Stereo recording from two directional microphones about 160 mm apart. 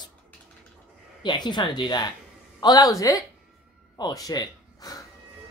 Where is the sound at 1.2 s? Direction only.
25° left (ahead or behind).